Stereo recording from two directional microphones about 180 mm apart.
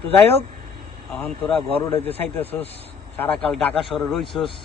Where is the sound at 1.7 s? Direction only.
10° left (ahead or behind).